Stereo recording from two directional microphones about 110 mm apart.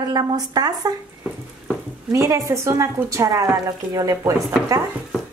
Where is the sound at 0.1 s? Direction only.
35° right (ahead or behind).